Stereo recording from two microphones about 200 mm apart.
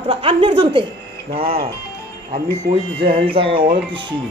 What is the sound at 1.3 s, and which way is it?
Speech, 50° right (ahead or behind).